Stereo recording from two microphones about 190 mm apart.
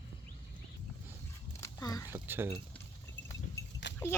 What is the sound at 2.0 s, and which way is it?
Speech, 10° right (ahead or behind).